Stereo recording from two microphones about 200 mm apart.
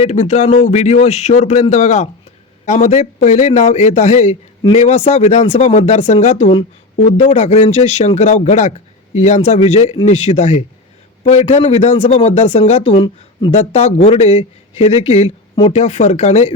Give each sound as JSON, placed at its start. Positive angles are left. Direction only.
{"t": 0.0, "sound": "speech", "side_deg": 35}